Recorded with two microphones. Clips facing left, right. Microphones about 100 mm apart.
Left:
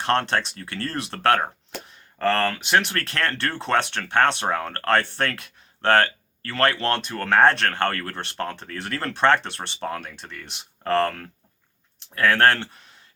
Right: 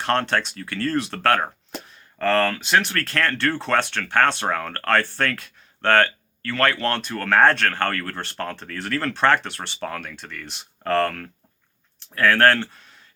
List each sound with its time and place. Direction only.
0.0 s speech: 25° left (ahead or behind)